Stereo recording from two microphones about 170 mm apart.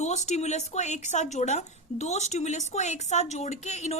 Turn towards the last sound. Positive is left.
turn(degrees=40)  # may be behind; listen again after turning